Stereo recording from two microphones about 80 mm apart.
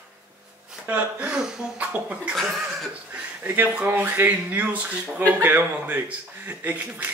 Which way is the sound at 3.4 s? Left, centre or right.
Right.